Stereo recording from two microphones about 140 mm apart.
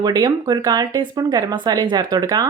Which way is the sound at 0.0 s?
30° right (ahead or behind).